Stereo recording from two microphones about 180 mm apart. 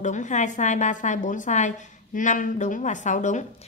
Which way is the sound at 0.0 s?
40° left (ahead or behind).